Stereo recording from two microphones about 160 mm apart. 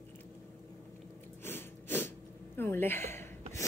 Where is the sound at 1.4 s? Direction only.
15° left (ahead or behind).